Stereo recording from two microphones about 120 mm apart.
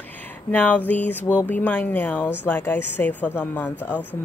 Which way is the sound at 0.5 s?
10° left (ahead or behind).